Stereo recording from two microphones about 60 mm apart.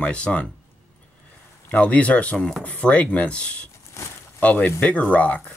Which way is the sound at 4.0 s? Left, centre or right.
Left.